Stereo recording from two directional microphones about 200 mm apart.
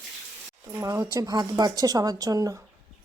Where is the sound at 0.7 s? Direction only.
15° right (ahead or behind).